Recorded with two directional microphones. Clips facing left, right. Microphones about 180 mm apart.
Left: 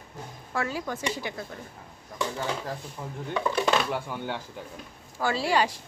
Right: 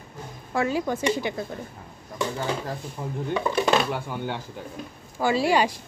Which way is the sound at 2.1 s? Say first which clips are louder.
Right 3 dB; 5° right (ahead or behind).